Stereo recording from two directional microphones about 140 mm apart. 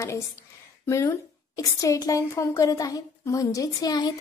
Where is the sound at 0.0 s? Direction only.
20° left (ahead or behind).